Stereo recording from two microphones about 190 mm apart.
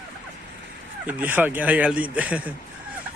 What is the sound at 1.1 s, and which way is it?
Speech, 10° right (ahead or behind).